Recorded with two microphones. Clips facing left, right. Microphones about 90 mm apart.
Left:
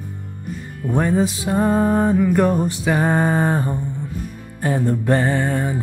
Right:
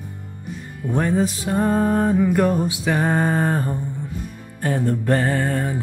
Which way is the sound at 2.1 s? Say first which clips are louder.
Left 1 dB; 5° right (ahead or behind).